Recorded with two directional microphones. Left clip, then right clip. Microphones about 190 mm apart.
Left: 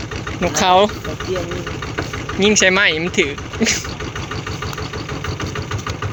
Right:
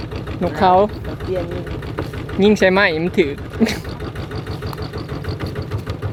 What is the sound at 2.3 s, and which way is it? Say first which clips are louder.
Speech: even; 25° right (ahead or behind).